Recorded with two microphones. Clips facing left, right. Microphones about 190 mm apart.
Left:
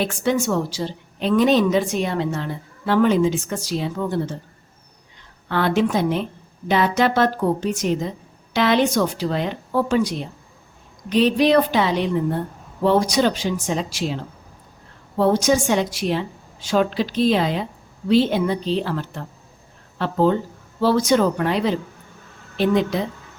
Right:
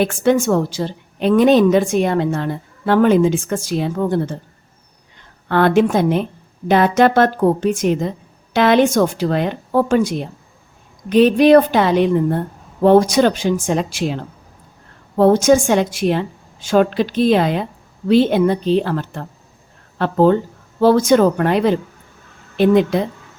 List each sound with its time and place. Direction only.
0.0 s a woman's voice: 55° right (ahead or behind)
5.5 s a woman's voice: 50° right (ahead or behind)
15.2 s a woman's voice: 50° right (ahead or behind)